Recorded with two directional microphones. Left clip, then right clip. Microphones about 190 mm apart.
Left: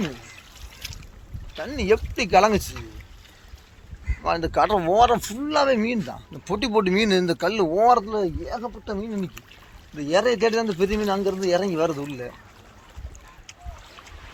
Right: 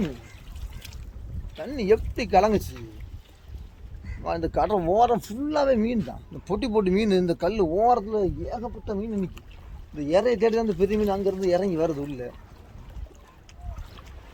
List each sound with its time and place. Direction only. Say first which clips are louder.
0.0 s speech: left 1 dB; 20° left (ahead or behind)
0.8 s boat: left 9 dB; 20° left (ahead or behind)
1.7 s speech: left 1 dB; centre (ahead or behind)
4.2 s speech: left 4 dB; centre (ahead or behind)